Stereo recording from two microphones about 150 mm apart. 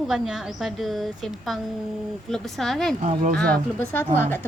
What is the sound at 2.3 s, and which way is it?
A woman's voice, centre (ahead or behind).